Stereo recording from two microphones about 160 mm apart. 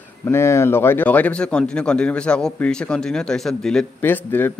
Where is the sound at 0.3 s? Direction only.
15° left (ahead or behind).